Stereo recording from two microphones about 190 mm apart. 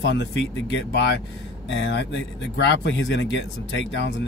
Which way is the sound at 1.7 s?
70° left (ahead or behind).